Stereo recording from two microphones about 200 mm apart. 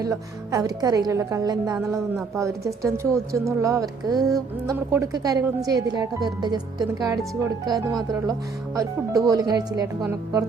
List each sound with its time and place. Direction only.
0.0 s speech: 20° right (ahead or behind)